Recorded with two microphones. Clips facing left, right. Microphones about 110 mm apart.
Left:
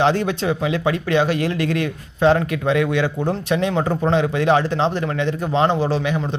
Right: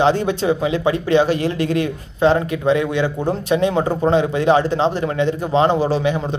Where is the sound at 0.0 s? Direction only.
5° right (ahead or behind).